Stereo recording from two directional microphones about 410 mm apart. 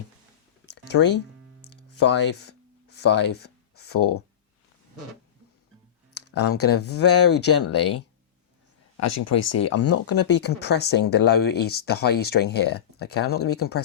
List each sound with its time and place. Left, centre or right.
0.6 s a sound: left
6.1 s speech: left
9.0 s speech: left